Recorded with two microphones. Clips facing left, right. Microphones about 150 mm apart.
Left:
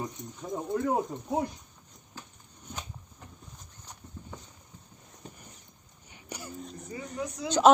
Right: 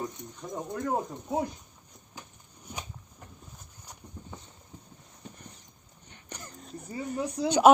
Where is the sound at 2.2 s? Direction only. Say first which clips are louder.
Even; 15° right (ahead or behind).